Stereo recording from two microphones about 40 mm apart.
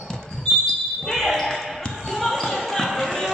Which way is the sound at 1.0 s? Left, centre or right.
Centre.